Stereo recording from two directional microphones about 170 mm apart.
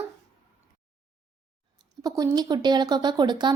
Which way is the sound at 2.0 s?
20° right (ahead or behind).